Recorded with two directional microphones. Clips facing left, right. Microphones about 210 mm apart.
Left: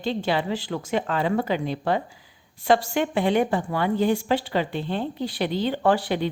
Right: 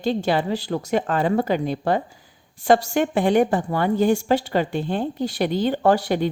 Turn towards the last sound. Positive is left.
turn(degrees=-45)  # may be behind; listen again after turning